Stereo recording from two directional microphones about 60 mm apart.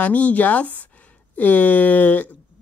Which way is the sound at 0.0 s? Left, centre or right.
Left.